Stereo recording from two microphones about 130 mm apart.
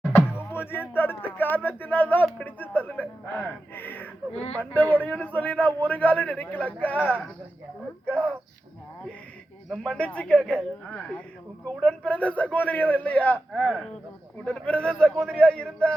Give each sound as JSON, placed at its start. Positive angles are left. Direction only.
{"t": 0.1, "sound": "music", "side_deg": 15}
{"t": 2.4, "sound": "a man's voice", "side_deg": 15}
{"t": 4.3, "sound": "speech", "side_deg": 50}
{"t": 4.5, "sound": "a man's voice", "side_deg": 15}
{"t": 9.6, "sound": "a man's voice", "side_deg": 5}
{"t": 13.5, "sound": "speech", "side_deg": 0}
{"t": 14.4, "sound": "a man's voice", "side_deg": 10}